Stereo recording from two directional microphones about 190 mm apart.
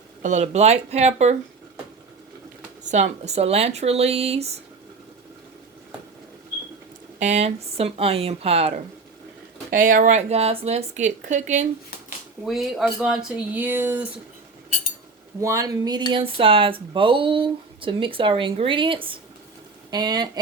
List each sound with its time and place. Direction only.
0.2 s speech: 40° right (ahead or behind)
2.8 s speech: 40° right (ahead or behind)
7.2 s speech: 35° right (ahead or behind)
9.6 s speech: 45° right (ahead or behind)
12.5 s speech: centre (ahead or behind)
15.4 s speech: 15° right (ahead or behind)